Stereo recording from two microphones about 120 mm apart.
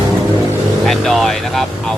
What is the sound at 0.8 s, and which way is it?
Speech, centre (ahead or behind).